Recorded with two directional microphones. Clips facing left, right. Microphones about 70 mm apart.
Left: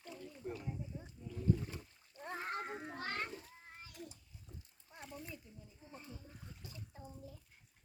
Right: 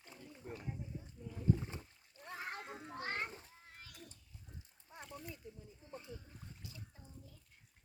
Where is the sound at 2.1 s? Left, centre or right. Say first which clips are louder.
Left 4 dB; left.